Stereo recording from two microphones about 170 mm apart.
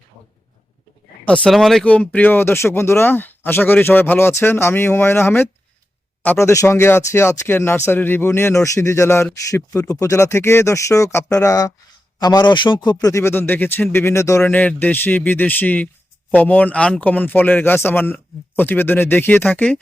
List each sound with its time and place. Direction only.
1.2 s speech: 5° left (ahead or behind)